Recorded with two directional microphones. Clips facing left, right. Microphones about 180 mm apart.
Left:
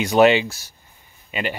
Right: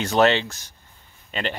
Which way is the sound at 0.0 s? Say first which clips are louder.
Left 4 dB; 10° left (ahead or behind).